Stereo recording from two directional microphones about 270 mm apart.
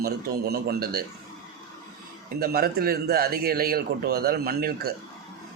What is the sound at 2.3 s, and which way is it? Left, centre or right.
A man's voice, right.